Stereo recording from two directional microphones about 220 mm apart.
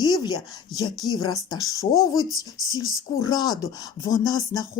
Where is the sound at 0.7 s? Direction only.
Centre (ahead or behind).